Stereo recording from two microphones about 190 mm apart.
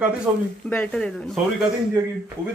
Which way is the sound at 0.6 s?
5° left (ahead or behind).